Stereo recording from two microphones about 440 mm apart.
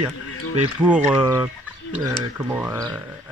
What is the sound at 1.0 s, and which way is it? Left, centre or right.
Speech, centre.